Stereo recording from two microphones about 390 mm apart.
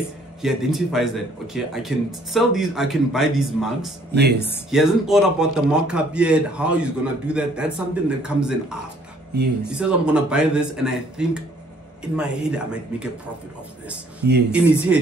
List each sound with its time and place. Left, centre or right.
0.4 s speech: centre
4.1 s speech: right
4.6 s speech: centre
14.5 s speech: centre